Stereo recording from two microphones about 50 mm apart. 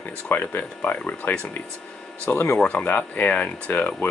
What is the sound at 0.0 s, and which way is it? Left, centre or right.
Speech, left.